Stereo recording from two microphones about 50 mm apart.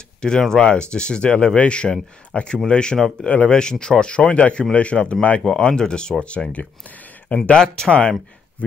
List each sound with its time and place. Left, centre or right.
0.2 s speech: centre
3.3 s speech: left
3.5 s speech: centre
5.4 s speech: centre
7.5 s speech: centre